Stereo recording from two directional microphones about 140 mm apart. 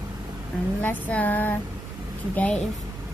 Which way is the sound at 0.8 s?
10° left (ahead or behind).